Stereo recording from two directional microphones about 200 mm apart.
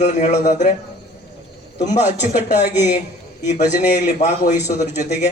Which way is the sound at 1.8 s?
35° left (ahead or behind).